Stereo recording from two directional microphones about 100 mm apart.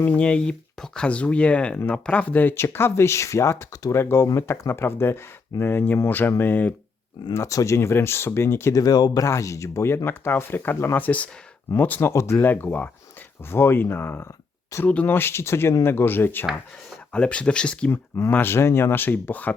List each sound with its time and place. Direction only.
0.0 s speech: 15° left (ahead or behind)
7.3 s speech: 30° left (ahead or behind)
8.8 s speech: 40° left (ahead or behind); by 16.5 s 20° left (ahead or behind)
17.1 s speech: 10° left (ahead or behind)